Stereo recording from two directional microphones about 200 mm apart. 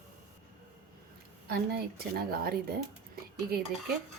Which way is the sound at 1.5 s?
50° right (ahead or behind).